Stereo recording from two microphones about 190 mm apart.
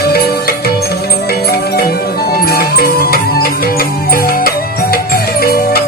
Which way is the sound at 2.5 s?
55° left (ahead or behind).